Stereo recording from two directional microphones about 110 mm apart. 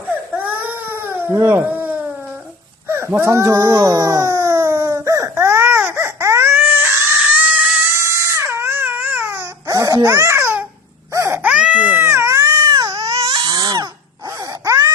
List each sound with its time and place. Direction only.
0.1 s baby cry: 15° right (ahead or behind)
2.8 s speech: 20° right (ahead or behind)
3.9 s baby cry: 35° right (ahead or behind)
7.2 s a sound: 10° right (ahead or behind)
8.0 s baby cry: 25° right (ahead or behind)
11.4 s baby cry: 10° right (ahead or behind); by 13.8 s 35° right (ahead or behind)
14.6 s wail: 25° right (ahead or behind)